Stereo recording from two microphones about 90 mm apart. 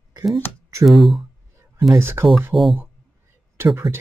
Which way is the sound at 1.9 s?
30° right (ahead or behind).